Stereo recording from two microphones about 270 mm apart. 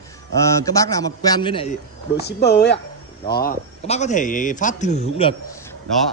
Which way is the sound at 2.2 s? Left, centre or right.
Left.